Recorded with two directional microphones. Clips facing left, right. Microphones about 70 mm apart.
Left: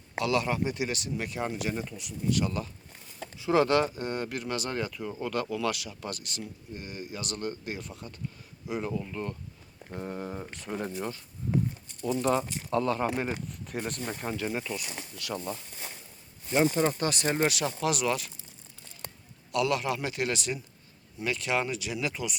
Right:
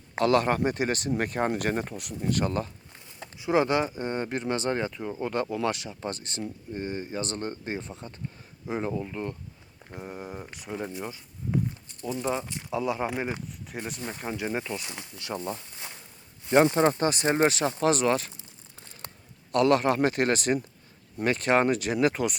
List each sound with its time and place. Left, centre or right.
0.2 s speech: right
3.3 s speech: right
8.9 s speech: centre
12.7 s speech: centre
13.5 s speech: centre; by 15.6 s right
16.5 s speech: right
17.0 s speech: right
19.5 s speech: right